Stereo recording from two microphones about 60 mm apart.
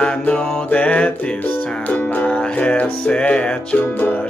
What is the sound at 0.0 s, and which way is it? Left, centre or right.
Music, left.